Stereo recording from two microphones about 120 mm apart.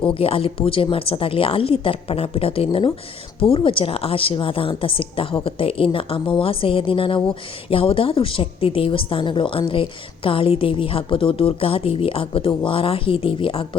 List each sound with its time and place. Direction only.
0.1 s a woman's voice: 50° left (ahead or behind)